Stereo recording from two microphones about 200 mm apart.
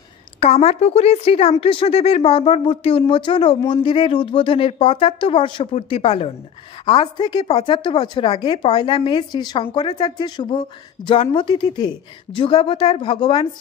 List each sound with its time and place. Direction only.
0.4 s speech: 35° left (ahead or behind)